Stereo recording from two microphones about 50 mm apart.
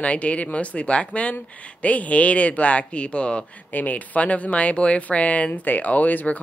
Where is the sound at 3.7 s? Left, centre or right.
Left.